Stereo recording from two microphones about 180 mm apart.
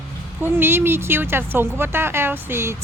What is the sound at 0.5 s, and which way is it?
Speech, 15° right (ahead or behind).